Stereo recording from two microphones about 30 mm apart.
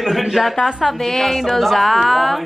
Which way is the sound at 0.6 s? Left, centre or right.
Centre.